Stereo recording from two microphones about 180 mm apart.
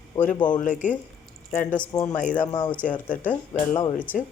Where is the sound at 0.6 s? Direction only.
45° left (ahead or behind).